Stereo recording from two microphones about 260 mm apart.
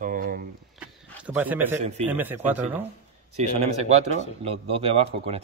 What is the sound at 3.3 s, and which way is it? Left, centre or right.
Speech, right.